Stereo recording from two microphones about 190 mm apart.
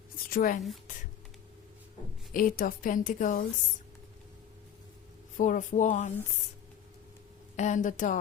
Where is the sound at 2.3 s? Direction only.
45° left (ahead or behind).